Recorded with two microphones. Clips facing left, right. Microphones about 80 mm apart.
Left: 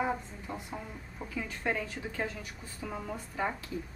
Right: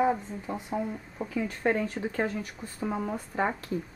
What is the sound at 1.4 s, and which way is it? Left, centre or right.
Speech, right.